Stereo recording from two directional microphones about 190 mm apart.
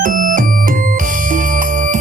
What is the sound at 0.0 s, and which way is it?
Music, 45° right (ahead or behind).